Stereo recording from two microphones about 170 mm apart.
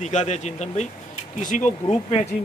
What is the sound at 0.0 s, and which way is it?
Speech, 40° left (ahead or behind).